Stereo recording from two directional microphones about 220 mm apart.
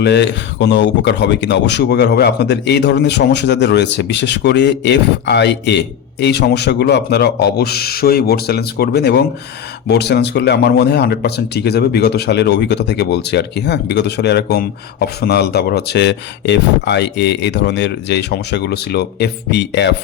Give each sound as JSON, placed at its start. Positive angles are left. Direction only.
{"t": 0.0, "sound": "speech", "side_deg": 50}